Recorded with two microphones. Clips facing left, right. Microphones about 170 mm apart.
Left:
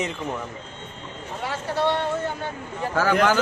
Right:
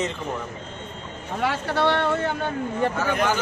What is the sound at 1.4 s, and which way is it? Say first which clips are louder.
Speech: right 2 dB; 70° right (ahead or behind).